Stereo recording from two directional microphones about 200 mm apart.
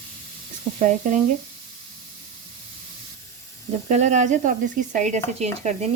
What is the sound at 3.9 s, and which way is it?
Speech, 35° right (ahead or behind).